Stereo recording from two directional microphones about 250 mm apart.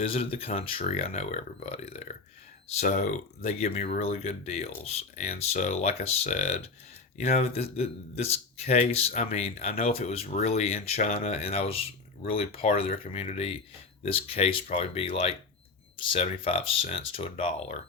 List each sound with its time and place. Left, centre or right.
0.0 s a man's voice: left